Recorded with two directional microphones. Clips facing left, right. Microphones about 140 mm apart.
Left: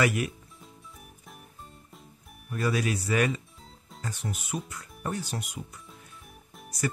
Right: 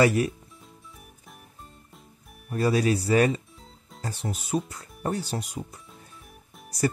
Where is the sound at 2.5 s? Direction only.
35° right (ahead or behind).